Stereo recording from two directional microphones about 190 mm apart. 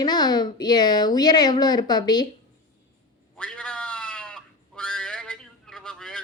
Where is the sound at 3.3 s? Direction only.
5° left (ahead or behind).